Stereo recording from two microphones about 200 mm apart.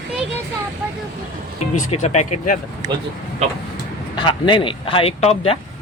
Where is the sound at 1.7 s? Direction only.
40° left (ahead or behind).